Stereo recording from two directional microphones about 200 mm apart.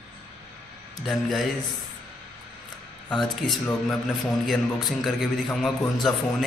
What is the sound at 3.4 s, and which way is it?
Speech, centre (ahead or behind).